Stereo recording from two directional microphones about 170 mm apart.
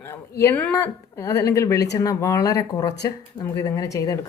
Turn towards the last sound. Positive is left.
turn(degrees=20)  # may be behind; listen again after turning